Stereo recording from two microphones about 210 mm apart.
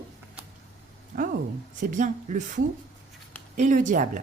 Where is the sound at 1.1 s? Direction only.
40° right (ahead or behind).